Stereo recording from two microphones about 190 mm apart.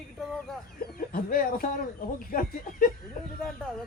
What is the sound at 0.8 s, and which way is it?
Speech, 50° left (ahead or behind).